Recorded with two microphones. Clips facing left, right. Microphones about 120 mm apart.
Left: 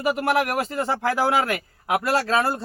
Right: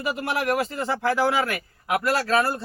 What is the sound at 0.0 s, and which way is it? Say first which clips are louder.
Speech: left 4 dB; 50° left (ahead or behind).